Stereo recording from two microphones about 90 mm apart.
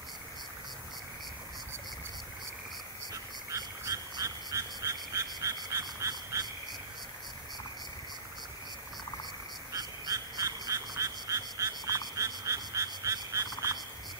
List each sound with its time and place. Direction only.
3.1 s frog: 40° right (ahead or behind)
9.7 s frog: 40° right (ahead or behind)